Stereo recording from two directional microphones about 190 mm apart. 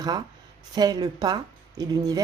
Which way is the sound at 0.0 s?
20° right (ahead or behind).